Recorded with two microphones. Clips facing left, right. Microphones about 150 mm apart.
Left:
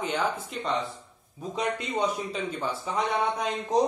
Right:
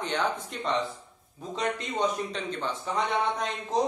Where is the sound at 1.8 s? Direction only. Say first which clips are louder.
Even; 10° left (ahead or behind).